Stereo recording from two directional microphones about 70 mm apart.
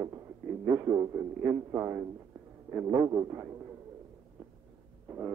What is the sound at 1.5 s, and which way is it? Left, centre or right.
A man's voice, right.